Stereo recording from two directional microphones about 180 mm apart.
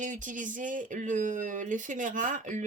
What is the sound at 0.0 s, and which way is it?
Speech, 45° right (ahead or behind).